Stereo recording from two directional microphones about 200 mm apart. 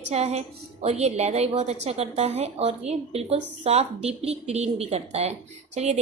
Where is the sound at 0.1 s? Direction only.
35° right (ahead or behind).